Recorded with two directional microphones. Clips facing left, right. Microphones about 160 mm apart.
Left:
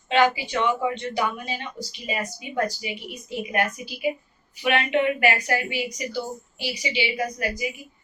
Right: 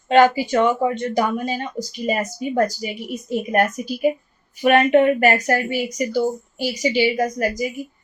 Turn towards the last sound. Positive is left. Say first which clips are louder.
# right 6 dB
turn(degrees=-45)  # may be behind; listen again after turning